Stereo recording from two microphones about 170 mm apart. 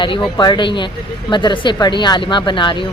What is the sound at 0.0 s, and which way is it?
Speech, 30° left (ahead or behind).